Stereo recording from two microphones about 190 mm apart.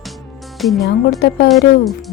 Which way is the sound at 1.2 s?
60° left (ahead or behind).